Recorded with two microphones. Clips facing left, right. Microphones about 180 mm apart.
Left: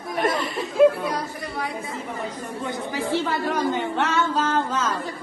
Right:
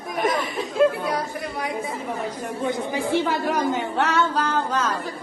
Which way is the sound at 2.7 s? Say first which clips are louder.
Right 2 dB; 15° right (ahead or behind).